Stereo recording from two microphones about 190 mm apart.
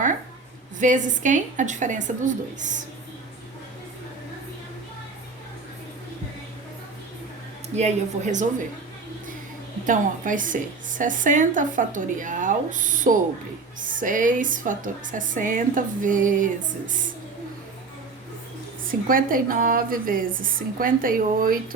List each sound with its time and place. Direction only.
0.8 s a woman's voice: 40° right (ahead or behind)
7.8 s a woman's voice: 35° right (ahead or behind)
9.8 s a woman's voice: 45° right (ahead or behind)
18.9 s a woman's voice: 45° right (ahead or behind)